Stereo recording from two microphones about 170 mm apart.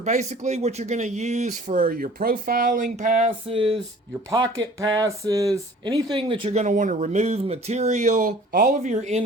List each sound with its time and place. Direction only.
0.0 s speech: 45° right (ahead or behind)
3.2 s speech: 30° right (ahead or behind)
4.3 s speech: 20° right (ahead or behind); by 9.2 s 40° right (ahead or behind)